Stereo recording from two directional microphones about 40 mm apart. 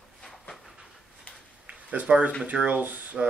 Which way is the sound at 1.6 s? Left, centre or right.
Right.